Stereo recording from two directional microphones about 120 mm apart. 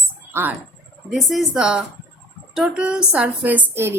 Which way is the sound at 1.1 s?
Centre (ahead or behind).